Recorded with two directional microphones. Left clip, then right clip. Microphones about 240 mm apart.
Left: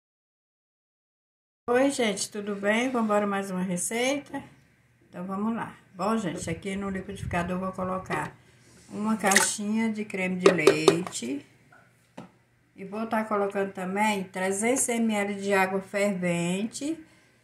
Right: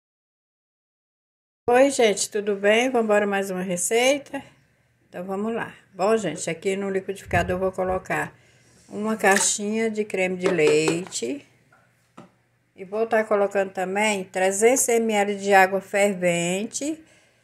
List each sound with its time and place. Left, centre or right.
1.6 s a woman's voice: right
12.7 s a woman's voice: right